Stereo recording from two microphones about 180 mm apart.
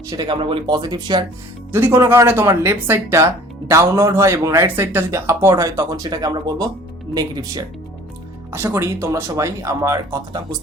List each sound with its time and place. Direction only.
0.1 s speech: 20° right (ahead or behind)
0.3 s speech: 30° right (ahead or behind)